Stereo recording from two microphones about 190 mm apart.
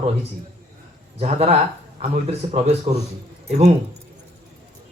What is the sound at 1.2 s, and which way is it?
Speech, 35° right (ahead or behind).